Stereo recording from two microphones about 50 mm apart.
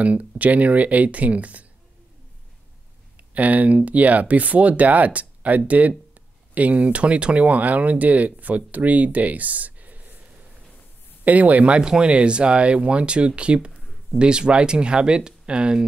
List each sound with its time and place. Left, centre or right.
0.0 s speech: right
3.2 s speech: right
11.2 s speech: right
13.7 s a sound: centre
14.1 s speech: centre